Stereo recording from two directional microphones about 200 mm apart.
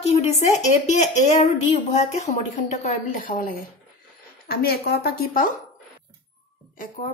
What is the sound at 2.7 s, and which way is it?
Speech, 40° left (ahead or behind).